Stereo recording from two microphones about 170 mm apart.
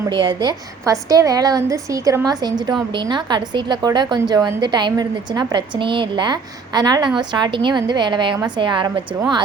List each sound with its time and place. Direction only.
0.0 s a woman's voice: 25° right (ahead or behind)